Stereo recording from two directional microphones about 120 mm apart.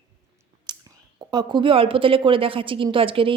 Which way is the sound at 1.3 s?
40° right (ahead or behind).